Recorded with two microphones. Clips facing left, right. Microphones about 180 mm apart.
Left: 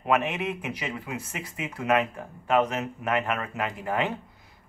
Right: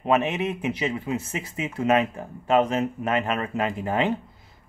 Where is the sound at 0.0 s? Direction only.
25° right (ahead or behind).